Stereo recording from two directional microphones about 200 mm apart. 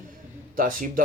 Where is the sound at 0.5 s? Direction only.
45° right (ahead or behind).